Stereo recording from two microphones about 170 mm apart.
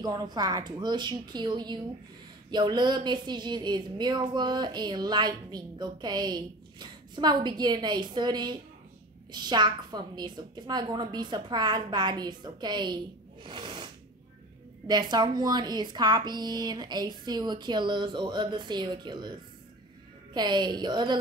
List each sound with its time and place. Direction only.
0.0 s speech: 25° right (ahead or behind)
14.9 s speech: 25° right (ahead or behind)
20.3 s speech: 25° right (ahead or behind)